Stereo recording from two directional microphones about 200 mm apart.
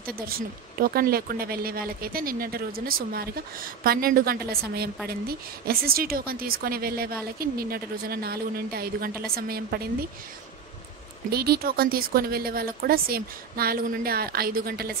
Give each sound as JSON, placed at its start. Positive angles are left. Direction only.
{"t": 0.0, "sound": "speech", "side_deg": -50}
{"t": 11.2, "sound": "speech", "side_deg": -50}